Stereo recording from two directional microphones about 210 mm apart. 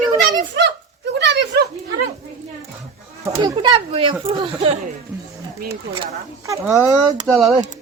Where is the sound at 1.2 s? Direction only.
50° right (ahead or behind).